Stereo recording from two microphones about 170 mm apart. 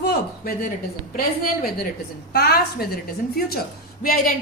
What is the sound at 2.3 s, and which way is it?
A woman's voice, 65° left (ahead or behind).